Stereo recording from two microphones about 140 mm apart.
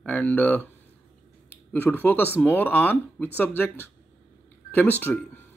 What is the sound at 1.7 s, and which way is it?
Speech, 15° left (ahead or behind).